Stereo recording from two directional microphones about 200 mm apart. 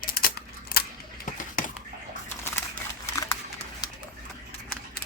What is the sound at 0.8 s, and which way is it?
Scissors, 50° left (ahead or behind).